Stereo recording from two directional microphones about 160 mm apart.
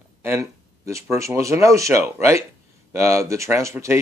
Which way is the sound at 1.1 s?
20° right (ahead or behind).